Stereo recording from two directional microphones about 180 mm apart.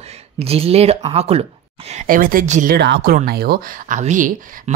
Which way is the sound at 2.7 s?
65° right (ahead or behind).